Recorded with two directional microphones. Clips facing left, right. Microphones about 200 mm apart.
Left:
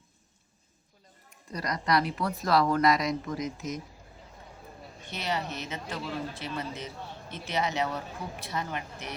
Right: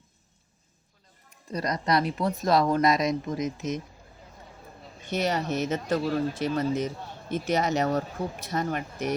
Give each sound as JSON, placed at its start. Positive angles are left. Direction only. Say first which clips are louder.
{"t": 1.5, "sound": "speech", "louder": "right 2 dB", "side_deg": -20}
{"t": 5.1, "sound": "speech", "louder": "right 7 dB", "side_deg": -45}